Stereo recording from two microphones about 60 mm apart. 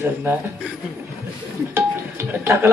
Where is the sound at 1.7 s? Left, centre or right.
Right.